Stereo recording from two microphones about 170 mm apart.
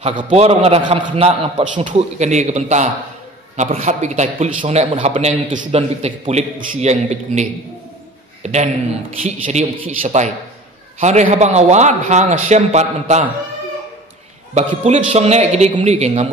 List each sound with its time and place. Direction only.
0.0 s a man's voice: 30° right (ahead or behind)
14.5 s a man's voice: 45° right (ahead or behind)